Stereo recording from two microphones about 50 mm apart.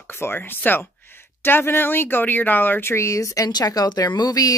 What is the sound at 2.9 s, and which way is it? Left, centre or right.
Speech, left.